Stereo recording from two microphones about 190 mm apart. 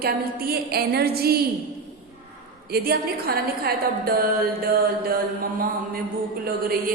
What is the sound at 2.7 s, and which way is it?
A woman's voice, 55° right (ahead or behind).